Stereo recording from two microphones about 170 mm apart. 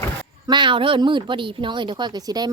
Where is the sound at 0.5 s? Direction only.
30° right (ahead or behind).